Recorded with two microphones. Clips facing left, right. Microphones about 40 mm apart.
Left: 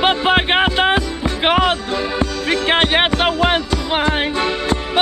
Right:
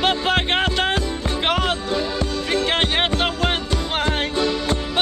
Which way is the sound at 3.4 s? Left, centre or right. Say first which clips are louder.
Left 5 dB; left.